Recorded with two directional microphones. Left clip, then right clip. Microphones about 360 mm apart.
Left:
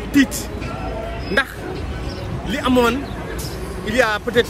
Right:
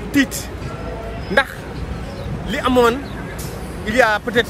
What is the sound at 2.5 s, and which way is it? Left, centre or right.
A man's voice, centre.